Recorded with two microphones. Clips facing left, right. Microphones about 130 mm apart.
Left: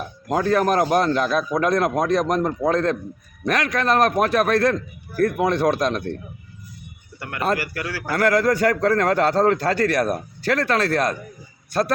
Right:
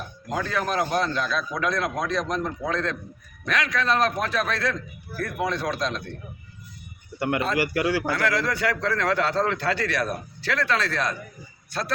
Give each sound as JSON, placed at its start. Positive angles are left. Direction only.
{"t": 0.3, "sound": "a man's voice", "side_deg": 50}
{"t": 7.7, "sound": "a man's voice", "side_deg": -20}
{"t": 8.1, "sound": "a man's voice", "side_deg": 50}